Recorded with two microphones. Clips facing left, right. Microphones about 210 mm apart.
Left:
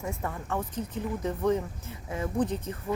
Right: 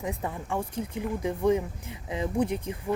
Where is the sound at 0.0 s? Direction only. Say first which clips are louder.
Right 2 dB; 15° right (ahead or behind).